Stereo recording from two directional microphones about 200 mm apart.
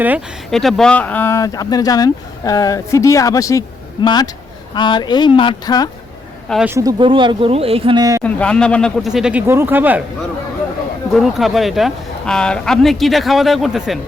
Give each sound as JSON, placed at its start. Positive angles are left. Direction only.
{"t": 0.5, "sound": "speech", "side_deg": 0}
{"t": 6.7, "sound": "speech", "side_deg": -15}
{"t": 8.2, "sound": "speech", "side_deg": 5}
{"t": 11.1, "sound": "speech", "side_deg": 0}